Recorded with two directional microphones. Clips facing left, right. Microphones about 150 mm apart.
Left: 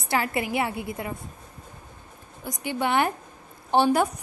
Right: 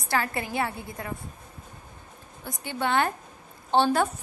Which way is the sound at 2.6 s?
20° left (ahead or behind).